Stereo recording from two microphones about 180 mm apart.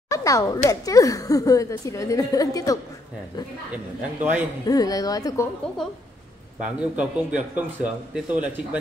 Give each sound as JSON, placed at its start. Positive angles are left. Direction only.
{"t": 0.1, "sound": "a sound", "side_deg": 20}
{"t": 0.7, "sound": "a woman's voice", "side_deg": 20}
{"t": 3.7, "sound": "a man's voice", "side_deg": -10}
{"t": 4.6, "sound": "a woman's voice", "side_deg": 20}
{"t": 5.8, "sound": "a woman's voice", "side_deg": 0}